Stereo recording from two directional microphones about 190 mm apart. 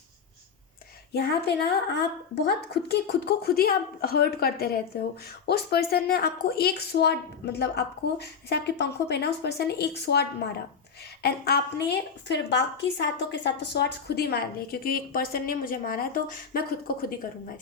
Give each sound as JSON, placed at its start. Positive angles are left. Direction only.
{"t": 1.1, "sound": "a woman's voice", "side_deg": 60}